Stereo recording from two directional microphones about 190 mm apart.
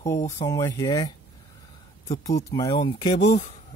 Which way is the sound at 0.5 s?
20° left (ahead or behind).